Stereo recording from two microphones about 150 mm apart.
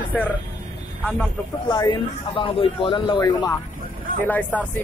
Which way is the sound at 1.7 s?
30° left (ahead or behind).